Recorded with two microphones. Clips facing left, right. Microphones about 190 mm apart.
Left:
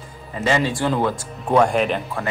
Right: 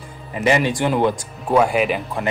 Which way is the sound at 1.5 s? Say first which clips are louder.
Even; 5° right (ahead or behind).